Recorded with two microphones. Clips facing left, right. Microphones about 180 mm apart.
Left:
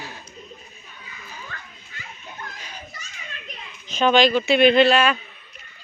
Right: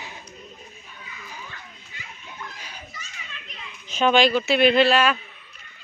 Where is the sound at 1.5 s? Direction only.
45° left (ahead or behind).